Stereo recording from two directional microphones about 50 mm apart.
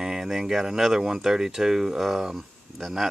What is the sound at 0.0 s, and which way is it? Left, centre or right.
Speech, centre.